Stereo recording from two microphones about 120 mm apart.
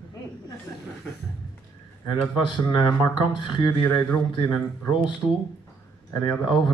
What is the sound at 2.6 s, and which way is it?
A man's voice, 40° left (ahead or behind).